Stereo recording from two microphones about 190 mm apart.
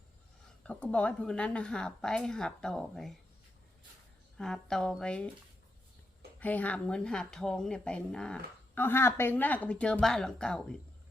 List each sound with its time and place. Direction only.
0.6 s speech: 5° left (ahead or behind)
4.4 s speech: 5° left (ahead or behind)
6.4 s speech: 10° left (ahead or behind)